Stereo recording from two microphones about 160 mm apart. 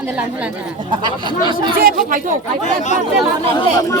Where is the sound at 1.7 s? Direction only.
65° right (ahead or behind).